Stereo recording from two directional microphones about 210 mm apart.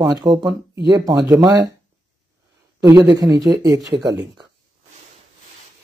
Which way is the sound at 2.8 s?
15° right (ahead or behind).